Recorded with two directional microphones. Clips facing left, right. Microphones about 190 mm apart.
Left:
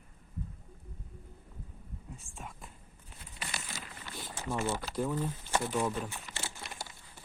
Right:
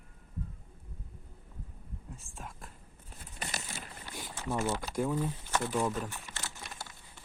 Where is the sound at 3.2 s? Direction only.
45° right (ahead or behind).